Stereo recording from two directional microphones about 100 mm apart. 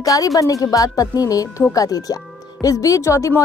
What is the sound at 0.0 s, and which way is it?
Speech, 35° left (ahead or behind).